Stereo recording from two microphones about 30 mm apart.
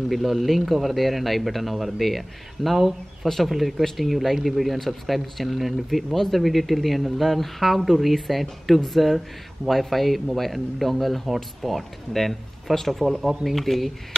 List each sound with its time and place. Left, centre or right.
0.1 s speech: centre